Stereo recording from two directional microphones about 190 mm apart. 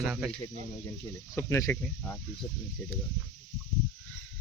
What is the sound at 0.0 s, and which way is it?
Speech, 5° right (ahead or behind).